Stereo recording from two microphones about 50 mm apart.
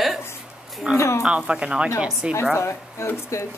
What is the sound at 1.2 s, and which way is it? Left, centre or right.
Speech, right.